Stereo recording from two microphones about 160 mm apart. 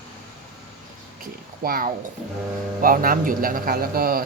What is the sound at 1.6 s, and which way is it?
A man's voice, 60° right (ahead or behind).